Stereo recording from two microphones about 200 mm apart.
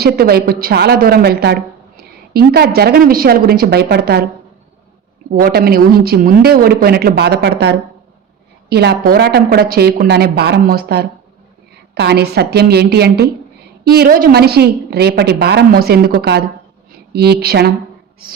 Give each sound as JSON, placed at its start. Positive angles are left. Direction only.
{"t": 0.0, "sound": "a woman's voice", "side_deg": -50}
{"t": 5.3, "sound": "a woman's voice", "side_deg": -50}